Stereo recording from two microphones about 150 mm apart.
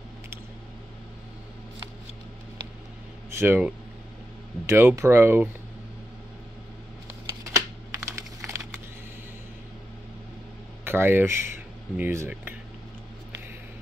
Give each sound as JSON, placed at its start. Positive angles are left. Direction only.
{"t": 3.3, "sound": "speech", "side_deg": -15}
{"t": 7.5, "sound": "computer keyboard", "side_deg": -20}
{"t": 10.8, "sound": "speech", "side_deg": -15}